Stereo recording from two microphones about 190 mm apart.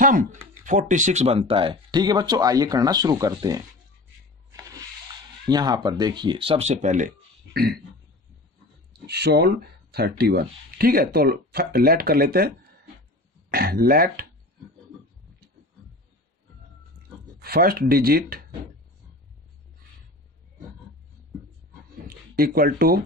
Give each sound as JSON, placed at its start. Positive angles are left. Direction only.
{"t": 0.0, "sound": "speech", "side_deg": -45}
{"t": 5.5, "sound": "speech", "side_deg": -20}
{"t": 7.5, "sound": "speech", "side_deg": -55}
{"t": 9.0, "sound": "speech", "side_deg": -60}
{"t": 13.5, "sound": "speech", "side_deg": -50}
{"t": 17.4, "sound": "speech", "side_deg": -50}
{"t": 22.0, "sound": "a sound", "side_deg": -50}